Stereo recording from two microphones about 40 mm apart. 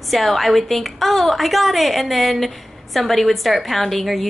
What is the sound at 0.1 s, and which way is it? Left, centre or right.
A woman's voice, centre.